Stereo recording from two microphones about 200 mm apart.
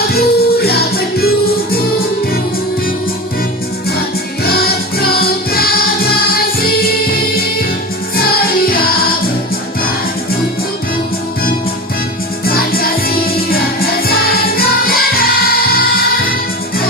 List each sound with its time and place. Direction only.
0.1 s music: 50° left (ahead or behind)
4.4 s music: 50° left (ahead or behind)
8.1 s music: 50° left (ahead or behind)
12.5 s music: 50° left (ahead or behind)